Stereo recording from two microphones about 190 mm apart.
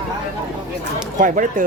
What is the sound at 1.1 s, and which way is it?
Speech, 45° right (ahead or behind).